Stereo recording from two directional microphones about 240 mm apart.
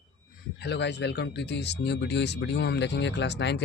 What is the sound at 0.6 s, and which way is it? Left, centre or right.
Speech, left.